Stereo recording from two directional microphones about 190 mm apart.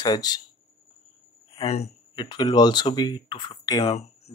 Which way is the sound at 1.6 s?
35° left (ahead or behind).